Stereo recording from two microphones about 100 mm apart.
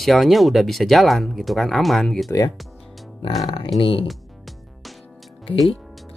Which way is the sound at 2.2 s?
35° left (ahead or behind).